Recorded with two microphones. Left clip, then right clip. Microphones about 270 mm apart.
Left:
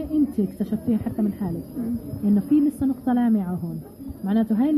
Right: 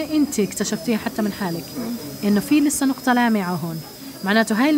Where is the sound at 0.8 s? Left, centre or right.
Right.